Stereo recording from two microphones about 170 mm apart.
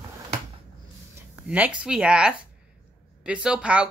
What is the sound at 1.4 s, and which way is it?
A woman's voice, 5° right (ahead or behind).